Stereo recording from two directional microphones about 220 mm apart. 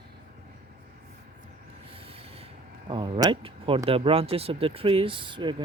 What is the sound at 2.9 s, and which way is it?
Speech, 20° right (ahead or behind).